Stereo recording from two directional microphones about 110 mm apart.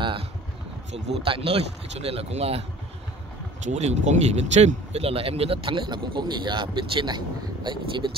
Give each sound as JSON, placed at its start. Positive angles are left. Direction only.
{"t": 0.9, "sound": "speech", "side_deg": -55}
{"t": 3.6, "sound": "speech", "side_deg": -90}